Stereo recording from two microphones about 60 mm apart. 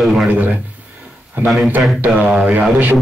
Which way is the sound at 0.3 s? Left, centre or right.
Right.